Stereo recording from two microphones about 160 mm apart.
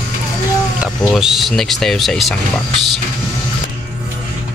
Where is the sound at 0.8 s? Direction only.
Centre (ahead or behind).